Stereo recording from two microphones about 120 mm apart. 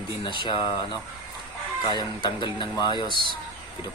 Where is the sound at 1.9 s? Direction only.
40° left (ahead or behind).